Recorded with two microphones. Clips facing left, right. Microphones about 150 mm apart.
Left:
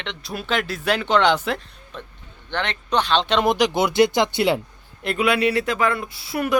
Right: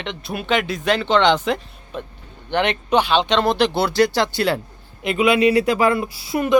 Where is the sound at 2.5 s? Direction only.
15° right (ahead or behind).